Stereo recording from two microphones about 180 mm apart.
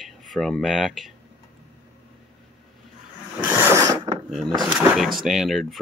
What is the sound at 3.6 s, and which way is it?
Mechanisms, 15° right (ahead or behind).